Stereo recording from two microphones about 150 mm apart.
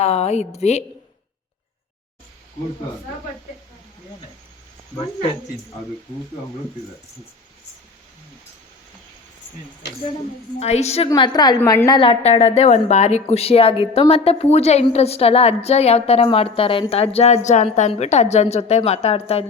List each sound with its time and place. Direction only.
0.0 s a woman's voice: 45° left (ahead or behind)
10.6 s a woman's voice: 45° left (ahead or behind)
11.1 s a woman's voice: 25° left (ahead or behind); by 19.5 s 40° left (ahead or behind)